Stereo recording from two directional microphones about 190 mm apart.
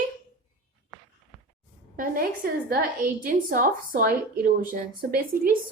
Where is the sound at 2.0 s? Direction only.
50° right (ahead or behind).